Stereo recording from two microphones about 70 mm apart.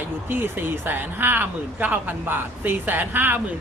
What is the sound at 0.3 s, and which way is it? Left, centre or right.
Speech, right.